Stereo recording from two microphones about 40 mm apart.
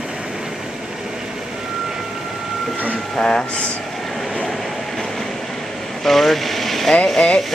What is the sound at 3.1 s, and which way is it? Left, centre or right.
Speech, left.